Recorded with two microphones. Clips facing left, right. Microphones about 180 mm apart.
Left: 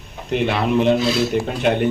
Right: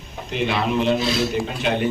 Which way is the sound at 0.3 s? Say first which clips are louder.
Left 4 dB; 55° left (ahead or behind).